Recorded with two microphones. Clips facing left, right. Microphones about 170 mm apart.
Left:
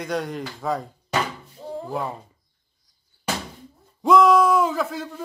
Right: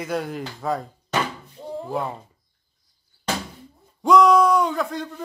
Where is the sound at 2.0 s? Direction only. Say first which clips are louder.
Right 1 dB; centre (ahead or behind).